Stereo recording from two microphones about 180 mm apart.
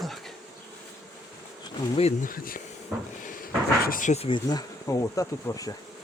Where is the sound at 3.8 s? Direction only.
50° left (ahead or behind).